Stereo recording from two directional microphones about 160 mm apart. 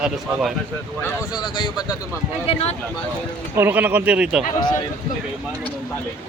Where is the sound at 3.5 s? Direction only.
15° right (ahead or behind).